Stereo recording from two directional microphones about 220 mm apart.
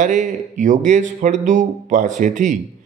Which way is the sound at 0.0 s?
35° right (ahead or behind).